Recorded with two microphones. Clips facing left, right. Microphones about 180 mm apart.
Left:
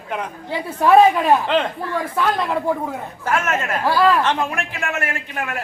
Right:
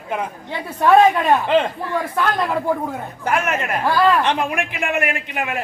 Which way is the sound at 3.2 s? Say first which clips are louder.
Even; 15° right (ahead or behind).